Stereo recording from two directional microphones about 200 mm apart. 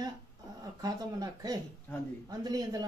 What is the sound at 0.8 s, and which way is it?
Speech, 20° right (ahead or behind).